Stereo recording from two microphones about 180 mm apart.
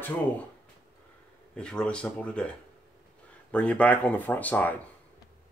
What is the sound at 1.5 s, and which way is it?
Speech, 5° left (ahead or behind).